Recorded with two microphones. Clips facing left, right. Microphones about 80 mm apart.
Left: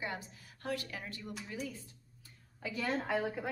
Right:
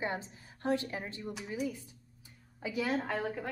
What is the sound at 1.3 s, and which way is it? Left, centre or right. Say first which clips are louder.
Speech: right 6 dB; centre.